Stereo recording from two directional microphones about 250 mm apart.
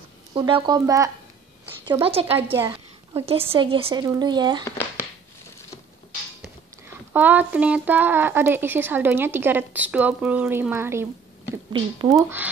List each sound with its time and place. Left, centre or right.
0.3 s a woman's voice: centre
2.3 s speech: centre
2.7 s speech: centre
4.6 s speech: centre
7.1 s speech: centre